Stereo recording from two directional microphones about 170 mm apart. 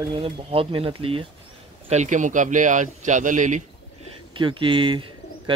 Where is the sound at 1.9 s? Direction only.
45° right (ahead or behind).